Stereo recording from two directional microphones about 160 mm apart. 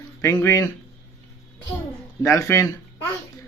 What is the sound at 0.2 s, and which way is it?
Speech, 15° left (ahead or behind).